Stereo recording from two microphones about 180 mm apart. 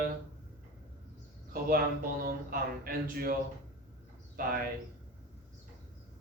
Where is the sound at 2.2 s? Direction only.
55° right (ahead or behind).